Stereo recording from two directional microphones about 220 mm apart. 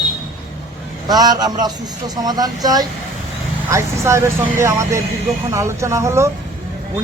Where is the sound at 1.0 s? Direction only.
20° right (ahead or behind).